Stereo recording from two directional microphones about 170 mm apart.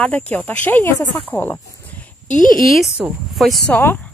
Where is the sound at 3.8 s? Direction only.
10° left (ahead or behind).